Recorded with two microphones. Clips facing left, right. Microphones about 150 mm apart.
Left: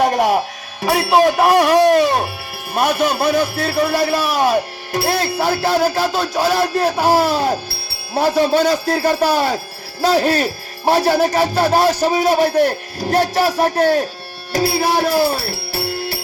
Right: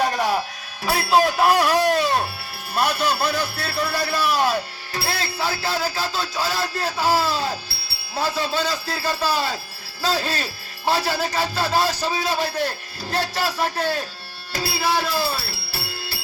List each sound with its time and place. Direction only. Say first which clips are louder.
0.0 s a man's voice: left 6 dB; 55° left (ahead or behind)